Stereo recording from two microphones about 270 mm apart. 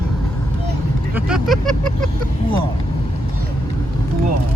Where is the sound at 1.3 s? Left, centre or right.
Centre.